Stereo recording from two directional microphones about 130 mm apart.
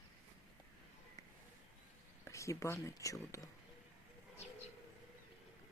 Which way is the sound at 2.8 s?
25° left (ahead or behind).